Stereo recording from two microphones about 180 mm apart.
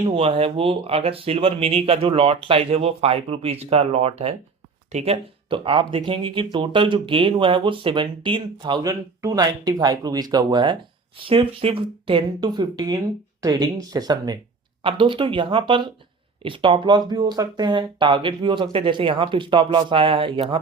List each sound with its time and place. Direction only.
0.0 s speech: 30° right (ahead or behind)